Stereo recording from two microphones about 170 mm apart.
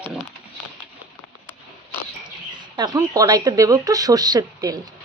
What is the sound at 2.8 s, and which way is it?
Speech, 20° right (ahead or behind).